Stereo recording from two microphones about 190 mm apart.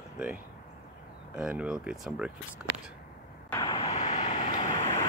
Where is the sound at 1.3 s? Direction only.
5° right (ahead or behind).